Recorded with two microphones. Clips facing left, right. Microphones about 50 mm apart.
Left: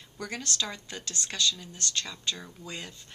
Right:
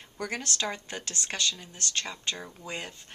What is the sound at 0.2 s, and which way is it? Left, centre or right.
Speech, right.